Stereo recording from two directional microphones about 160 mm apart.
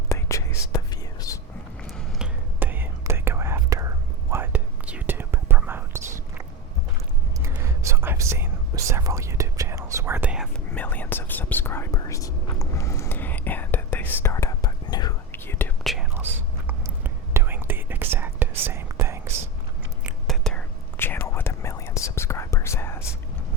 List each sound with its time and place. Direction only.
0.1 s whispering: 20° left (ahead or behind)
2.1 s whispering: 10° right (ahead or behind)
7.4 s whispering: 15° right (ahead or behind)
10.7 s whispering: 10° left (ahead or behind)
15.3 s whispering: 10° left (ahead or behind)
15.8 s whispering: centre (ahead or behind)
16.6 s whispering: 15° right (ahead or behind)
20.1 s whispering: centre (ahead or behind); by 23.0 s 15° left (ahead or behind)